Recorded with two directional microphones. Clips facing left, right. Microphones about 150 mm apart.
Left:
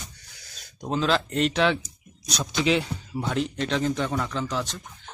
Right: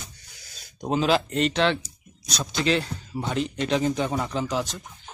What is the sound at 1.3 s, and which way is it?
A man's voice, centre (ahead or behind).